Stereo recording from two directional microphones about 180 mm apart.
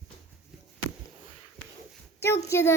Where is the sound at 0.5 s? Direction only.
Centre (ahead or behind).